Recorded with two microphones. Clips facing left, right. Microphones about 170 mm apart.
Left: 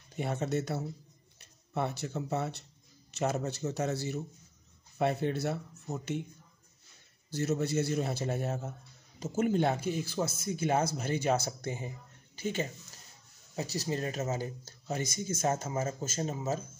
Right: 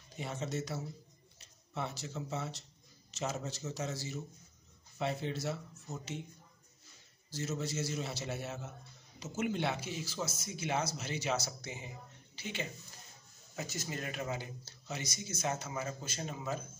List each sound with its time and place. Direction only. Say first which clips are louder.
0.1 s speech: left 7 dB; 60° left (ahead or behind)
7.2 s speech: left 7 dB; 60° left (ahead or behind); by 12.6 s 45° left (ahead or behind)
13.6 s speech: left 7 dB; 35° left (ahead or behind)